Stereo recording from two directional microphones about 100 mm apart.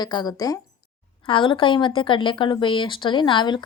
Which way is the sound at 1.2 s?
55° left (ahead or behind).